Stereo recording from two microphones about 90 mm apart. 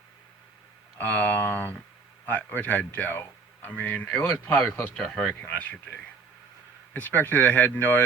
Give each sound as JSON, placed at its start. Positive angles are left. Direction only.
{"t": 0.9, "sound": "speech", "side_deg": 15}